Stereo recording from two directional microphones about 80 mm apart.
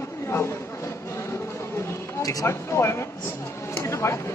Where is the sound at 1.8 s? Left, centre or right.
Left.